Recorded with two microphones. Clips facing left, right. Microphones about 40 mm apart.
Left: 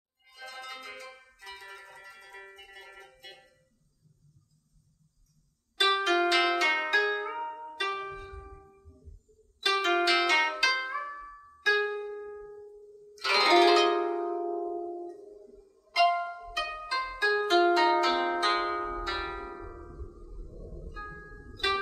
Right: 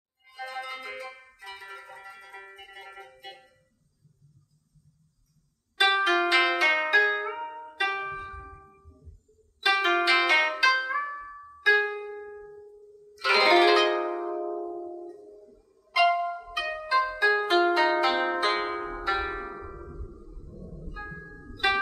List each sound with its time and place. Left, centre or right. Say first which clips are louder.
0.2 s music: right 7 dB; centre
5.8 s music: right 3 dB; centre
9.6 s music: right 3 dB; centre
10.9 s music: right 5 dB; right
14.6 s music: left 1 dB; centre